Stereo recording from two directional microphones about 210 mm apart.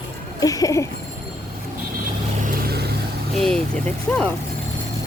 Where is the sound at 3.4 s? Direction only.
5° left (ahead or behind).